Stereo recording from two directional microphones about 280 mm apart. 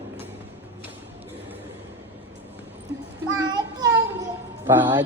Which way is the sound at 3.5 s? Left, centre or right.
Centre.